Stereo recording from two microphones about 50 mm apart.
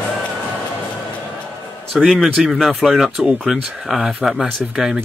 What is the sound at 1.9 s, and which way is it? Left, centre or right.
Speech, centre.